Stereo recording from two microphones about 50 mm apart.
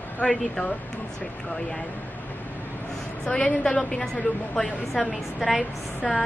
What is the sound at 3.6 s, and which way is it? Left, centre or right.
Speech, centre.